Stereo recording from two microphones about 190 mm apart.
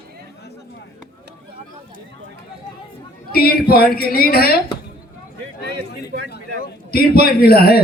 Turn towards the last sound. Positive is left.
turn(degrees=55)  # may be behind; listen again after turning